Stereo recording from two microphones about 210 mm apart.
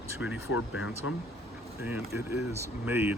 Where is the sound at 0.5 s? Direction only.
70° left (ahead or behind).